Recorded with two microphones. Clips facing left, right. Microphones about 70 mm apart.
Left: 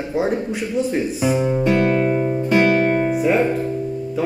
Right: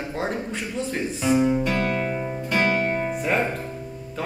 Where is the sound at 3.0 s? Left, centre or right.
Centre.